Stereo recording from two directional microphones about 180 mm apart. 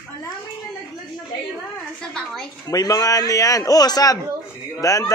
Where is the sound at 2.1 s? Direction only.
5° left (ahead or behind).